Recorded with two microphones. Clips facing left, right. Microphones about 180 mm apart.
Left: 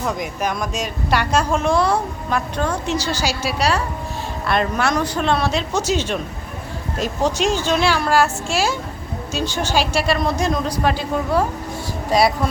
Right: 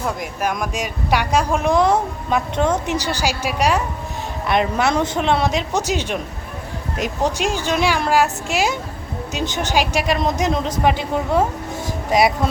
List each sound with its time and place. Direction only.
0.0 s a woman's voice: 5° right (ahead or behind)